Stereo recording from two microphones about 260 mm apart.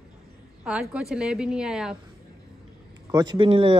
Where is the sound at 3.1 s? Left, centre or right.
Centre.